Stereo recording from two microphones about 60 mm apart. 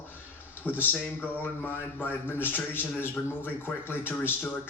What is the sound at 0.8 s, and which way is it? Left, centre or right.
Speech, left.